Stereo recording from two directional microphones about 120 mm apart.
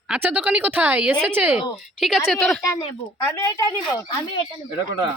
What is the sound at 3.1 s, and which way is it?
Speech, 25° left (ahead or behind).